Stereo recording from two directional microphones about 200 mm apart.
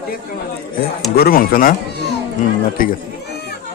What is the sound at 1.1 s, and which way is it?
Speech, 50° left (ahead or behind).